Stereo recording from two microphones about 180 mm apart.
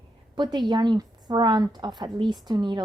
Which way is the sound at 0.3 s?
25° right (ahead or behind).